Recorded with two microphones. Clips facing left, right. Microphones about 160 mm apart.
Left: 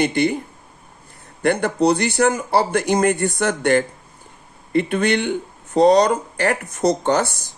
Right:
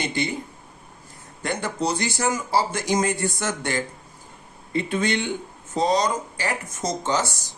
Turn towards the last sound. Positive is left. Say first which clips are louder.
# left 6 dB
turn(degrees=55)  # may be behind; listen again after turning